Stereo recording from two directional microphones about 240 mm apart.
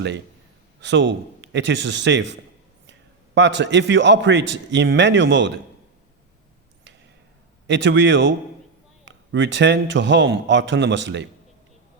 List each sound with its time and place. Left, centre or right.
0.8 s a man's voice: right
7.7 s a man's voice: right